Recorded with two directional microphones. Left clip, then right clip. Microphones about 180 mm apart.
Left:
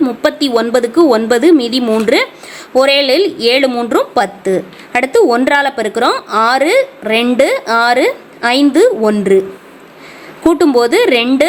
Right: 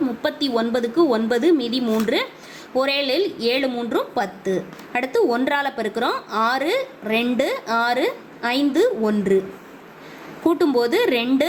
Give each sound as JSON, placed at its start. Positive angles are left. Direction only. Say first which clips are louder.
{"t": 0.0, "sound": "a woman's voice", "louder": "left 10 dB", "side_deg": 40}
{"t": 10.4, "sound": "a woman's voice", "louder": "left 9 dB", "side_deg": 35}